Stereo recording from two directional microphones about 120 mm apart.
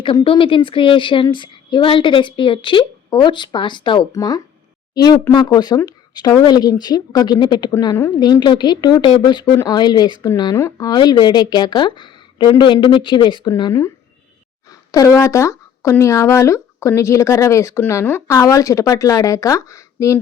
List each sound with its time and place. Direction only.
0.0 s a woman's voice: 45° left (ahead or behind)
4.1 s a woman's voice: 30° left (ahead or behind)
10.9 s a woman's voice: 40° left (ahead or behind)
14.7 s speech: 30° left (ahead or behind)